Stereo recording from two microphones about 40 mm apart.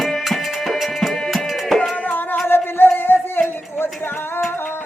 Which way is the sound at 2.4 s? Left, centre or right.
Left.